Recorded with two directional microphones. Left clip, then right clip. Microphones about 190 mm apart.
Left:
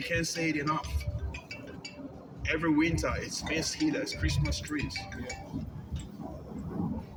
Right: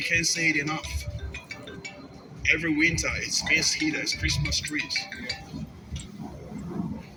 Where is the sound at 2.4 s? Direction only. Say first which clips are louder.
Right 5 dB; 40° left (ahead or behind).